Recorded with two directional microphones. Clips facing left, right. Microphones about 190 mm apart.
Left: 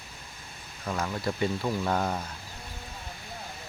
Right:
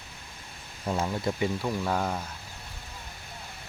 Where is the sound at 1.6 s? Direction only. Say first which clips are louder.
Left 1 dB; 5° left (ahead or behind).